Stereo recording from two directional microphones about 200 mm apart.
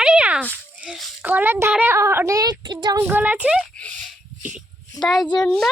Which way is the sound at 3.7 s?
5° left (ahead or behind).